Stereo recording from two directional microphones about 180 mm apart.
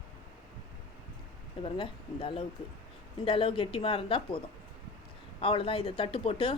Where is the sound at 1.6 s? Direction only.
30° left (ahead or behind).